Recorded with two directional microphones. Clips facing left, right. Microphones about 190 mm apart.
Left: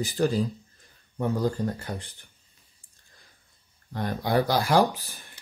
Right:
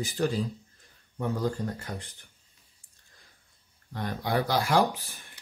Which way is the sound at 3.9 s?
35° left (ahead or behind).